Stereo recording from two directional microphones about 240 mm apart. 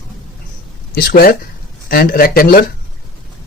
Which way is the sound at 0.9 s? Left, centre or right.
Left.